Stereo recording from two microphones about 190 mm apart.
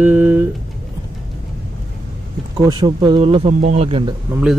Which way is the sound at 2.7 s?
25° right (ahead or behind).